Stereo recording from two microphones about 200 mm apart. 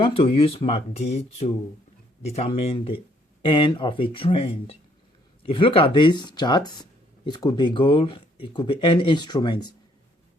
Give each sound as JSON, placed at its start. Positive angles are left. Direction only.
{"t": 0.0, "sound": "speech", "side_deg": 30}